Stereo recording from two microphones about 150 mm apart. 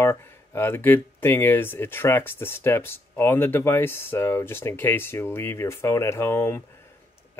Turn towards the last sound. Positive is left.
turn(degrees=15)  # may be behind; listen again after turning